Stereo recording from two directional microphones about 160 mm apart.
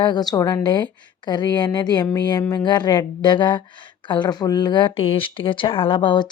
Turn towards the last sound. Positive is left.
turn(degrees=30)  # may be behind; listen again after turning